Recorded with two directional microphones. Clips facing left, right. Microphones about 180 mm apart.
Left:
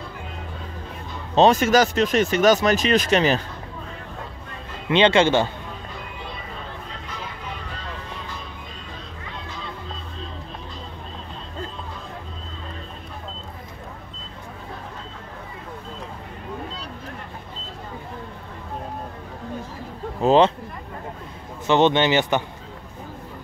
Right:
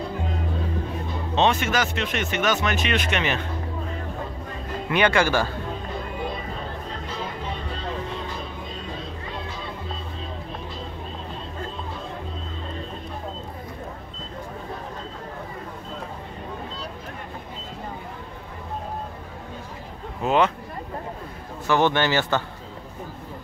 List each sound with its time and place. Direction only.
1.3 s speech: 40° left (ahead or behind)
4.8 s speech: 25° left (ahead or behind)
20.2 s speech: 30° left (ahead or behind)
21.6 s speech: 20° left (ahead or behind)